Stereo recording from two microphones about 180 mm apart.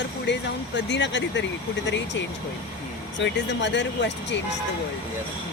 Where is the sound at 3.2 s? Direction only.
80° left.